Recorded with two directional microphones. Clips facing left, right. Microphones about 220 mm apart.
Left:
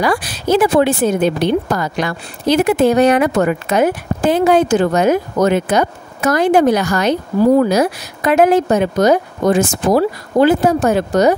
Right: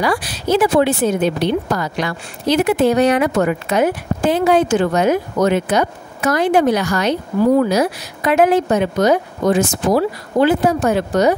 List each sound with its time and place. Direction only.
0.0 s a woman's voice: 50° left (ahead or behind)